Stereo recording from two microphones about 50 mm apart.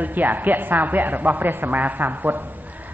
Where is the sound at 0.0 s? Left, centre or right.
Right.